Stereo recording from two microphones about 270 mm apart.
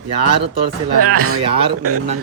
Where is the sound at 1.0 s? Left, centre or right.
Right.